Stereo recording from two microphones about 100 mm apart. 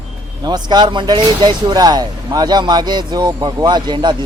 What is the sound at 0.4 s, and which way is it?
Speech, 45° right (ahead or behind).